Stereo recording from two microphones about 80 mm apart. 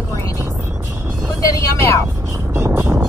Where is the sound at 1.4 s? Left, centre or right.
Left.